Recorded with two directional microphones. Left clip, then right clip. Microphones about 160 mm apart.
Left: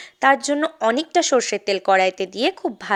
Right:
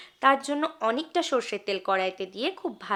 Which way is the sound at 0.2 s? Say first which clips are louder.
Left 6 dB; 40° left (ahead or behind).